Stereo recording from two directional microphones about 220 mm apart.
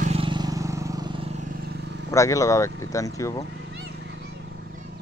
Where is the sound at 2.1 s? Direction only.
15° left (ahead or behind).